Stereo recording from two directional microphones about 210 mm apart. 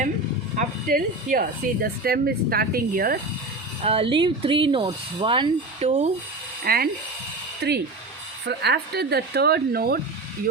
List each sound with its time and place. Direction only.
0.5 s speech: 40° right (ahead or behind)
3.8 s speech: 25° right (ahead or behind)
6.7 s speech: 45° right (ahead or behind)